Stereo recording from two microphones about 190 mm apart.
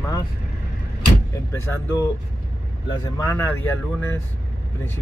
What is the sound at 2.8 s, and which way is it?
Speech, 15° left (ahead or behind).